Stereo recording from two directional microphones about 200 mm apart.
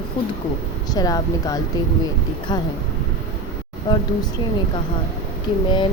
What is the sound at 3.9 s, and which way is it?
Speech, 20° left (ahead or behind).